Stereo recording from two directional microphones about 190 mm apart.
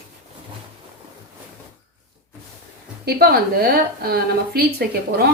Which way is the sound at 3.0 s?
55° right (ahead or behind).